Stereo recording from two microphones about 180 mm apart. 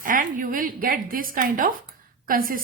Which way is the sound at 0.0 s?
50° right (ahead or behind).